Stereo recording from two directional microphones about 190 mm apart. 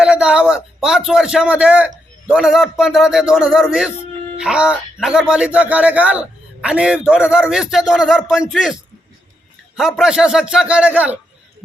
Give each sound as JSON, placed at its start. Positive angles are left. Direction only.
{"t": 0.0, "sound": "speech", "side_deg": -5}